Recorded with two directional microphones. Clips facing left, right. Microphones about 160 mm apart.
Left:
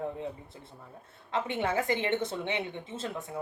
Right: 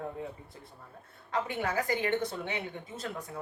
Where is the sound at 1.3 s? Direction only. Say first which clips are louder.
Left 2 dB; 25° left (ahead or behind).